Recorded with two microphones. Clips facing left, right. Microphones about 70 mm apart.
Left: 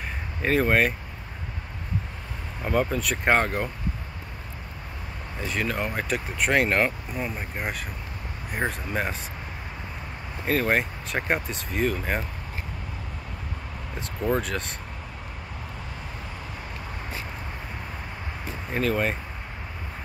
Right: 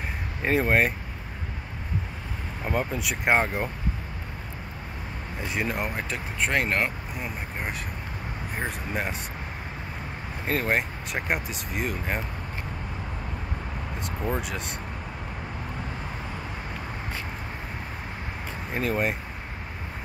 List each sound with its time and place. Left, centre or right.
0.4 s speech: centre
2.6 s speech: centre
5.4 s speech: centre
5.9 s speech: centre
10.7 s speech: centre
13.9 s speech: centre
18.7 s speech: centre